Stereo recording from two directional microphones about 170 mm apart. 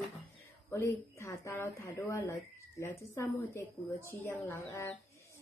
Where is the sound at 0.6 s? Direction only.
15° left (ahead or behind).